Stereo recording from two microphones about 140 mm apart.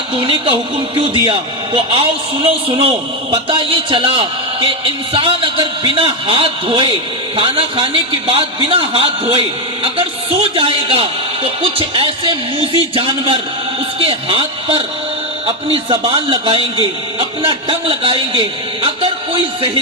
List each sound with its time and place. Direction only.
0.1 s a man's voice: 40° right (ahead or behind)